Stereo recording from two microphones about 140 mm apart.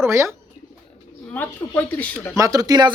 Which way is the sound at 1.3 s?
15° left (ahead or behind).